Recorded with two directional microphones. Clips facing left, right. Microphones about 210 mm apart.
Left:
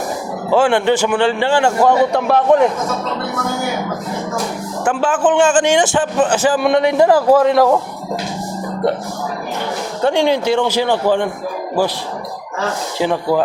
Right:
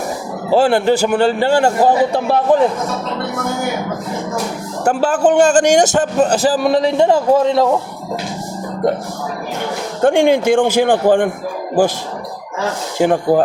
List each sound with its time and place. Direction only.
0.5 s a man's voice: 40° right (ahead or behind)
4.9 s a man's voice: 40° right (ahead or behind)
10.0 s a man's voice: 50° right (ahead or behind)
13.0 s a man's voice: 50° right (ahead or behind)